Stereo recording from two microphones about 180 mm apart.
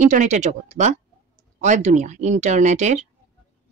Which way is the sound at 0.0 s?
45° right (ahead or behind).